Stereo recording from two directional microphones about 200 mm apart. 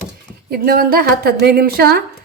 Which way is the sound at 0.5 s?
50° right (ahead or behind).